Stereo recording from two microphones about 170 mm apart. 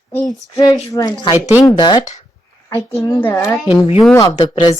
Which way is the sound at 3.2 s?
10° left (ahead or behind).